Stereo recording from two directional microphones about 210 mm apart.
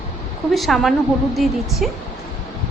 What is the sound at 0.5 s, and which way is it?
A woman's voice, centre (ahead or behind).